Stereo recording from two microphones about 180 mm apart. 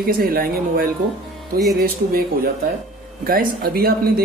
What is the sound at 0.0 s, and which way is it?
Speech, 55° right (ahead or behind).